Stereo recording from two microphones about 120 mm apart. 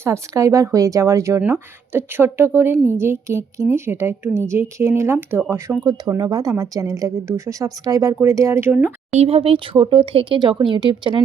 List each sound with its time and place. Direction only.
0.0 s speech: 25° right (ahead or behind)
5.8 s speech: 35° right (ahead or behind); by 8.9 s 15° right (ahead or behind)
9.1 s speech: 55° right (ahead or behind)